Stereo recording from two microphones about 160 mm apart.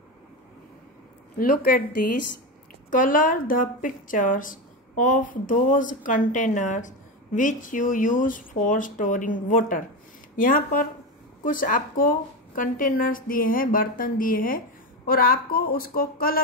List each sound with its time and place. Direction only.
1.4 s a woman's voice: 60° left (ahead or behind)